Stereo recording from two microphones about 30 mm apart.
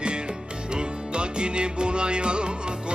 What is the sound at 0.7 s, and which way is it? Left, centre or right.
Music, right.